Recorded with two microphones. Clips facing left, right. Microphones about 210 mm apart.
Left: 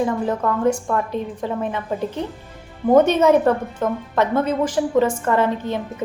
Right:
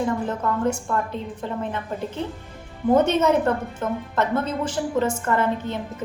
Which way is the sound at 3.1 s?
10° left (ahead or behind).